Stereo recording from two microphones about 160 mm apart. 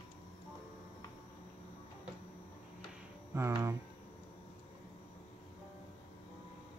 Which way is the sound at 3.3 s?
15° right (ahead or behind).